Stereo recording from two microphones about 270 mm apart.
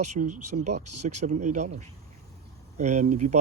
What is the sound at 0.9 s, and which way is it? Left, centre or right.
Speech, right.